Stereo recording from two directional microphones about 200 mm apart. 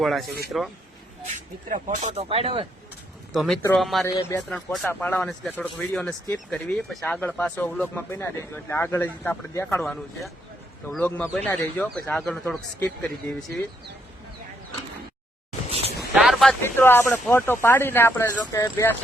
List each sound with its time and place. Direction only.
0.0 s speech: centre (ahead or behind)
1.7 s speech: 40° right (ahead or behind)
3.3 s speech: centre (ahead or behind)
4.0 s speech: 15° left (ahead or behind)
4.4 s speech: centre (ahead or behind)
9.8 s speech: centre (ahead or behind)
16.1 s vehicle: centre (ahead or behind)
16.6 s speech: 10° left (ahead or behind)